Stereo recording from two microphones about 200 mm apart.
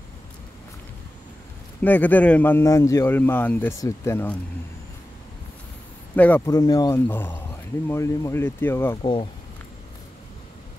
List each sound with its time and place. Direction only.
1.8 s speech: 10° left (ahead or behind)
6.1 s speech: 5° left (ahead or behind)
6.4 s speech: 20° left (ahead or behind)
9.0 s speech: 25° left (ahead or behind)